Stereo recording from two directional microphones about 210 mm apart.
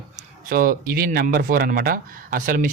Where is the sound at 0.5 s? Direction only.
45° right (ahead or behind).